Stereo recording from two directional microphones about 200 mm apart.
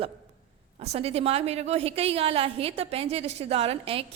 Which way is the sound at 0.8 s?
30° right (ahead or behind).